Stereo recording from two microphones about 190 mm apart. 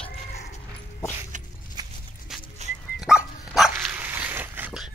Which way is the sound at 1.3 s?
40° right (ahead or behind).